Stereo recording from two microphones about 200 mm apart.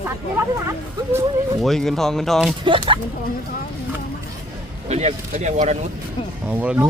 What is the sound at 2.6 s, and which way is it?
Speech, 25° right (ahead or behind).